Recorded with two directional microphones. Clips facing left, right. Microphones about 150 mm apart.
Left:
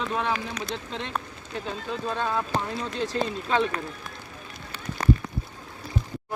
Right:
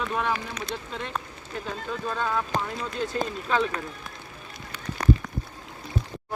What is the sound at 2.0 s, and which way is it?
Speech, 15° left (ahead or behind).